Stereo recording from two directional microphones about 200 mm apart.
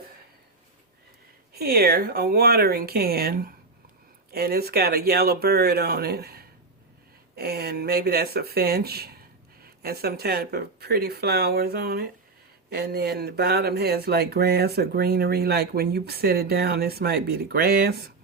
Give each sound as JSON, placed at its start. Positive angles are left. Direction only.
{"t": 1.5, "sound": "speech", "side_deg": -50}